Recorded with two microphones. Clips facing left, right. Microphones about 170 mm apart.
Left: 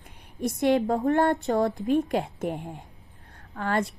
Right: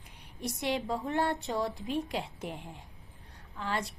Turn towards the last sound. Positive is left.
turn(degrees=55)  # may be behind; listen again after turning